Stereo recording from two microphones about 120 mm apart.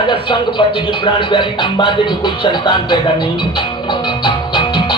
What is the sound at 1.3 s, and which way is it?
Music, 40° left (ahead or behind).